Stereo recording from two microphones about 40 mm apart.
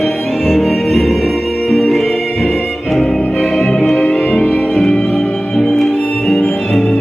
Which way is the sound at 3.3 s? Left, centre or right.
Centre.